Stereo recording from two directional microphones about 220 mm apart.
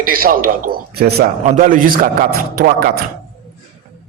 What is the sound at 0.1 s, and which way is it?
Speech, 40° right (ahead or behind).